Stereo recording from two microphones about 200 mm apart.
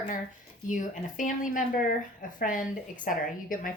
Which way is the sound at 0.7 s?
40° left (ahead or behind).